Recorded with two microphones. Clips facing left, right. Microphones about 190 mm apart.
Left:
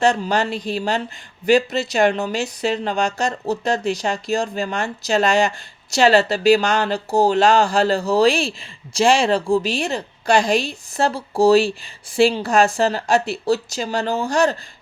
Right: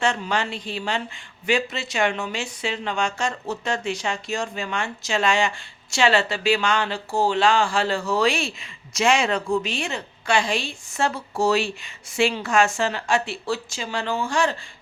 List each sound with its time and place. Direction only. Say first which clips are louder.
0.0 s a woman's voice: left 6 dB; 40° left (ahead or behind)